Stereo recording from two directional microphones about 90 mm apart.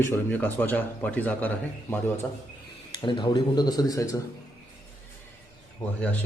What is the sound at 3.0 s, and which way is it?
Speech, 60° left (ahead or behind).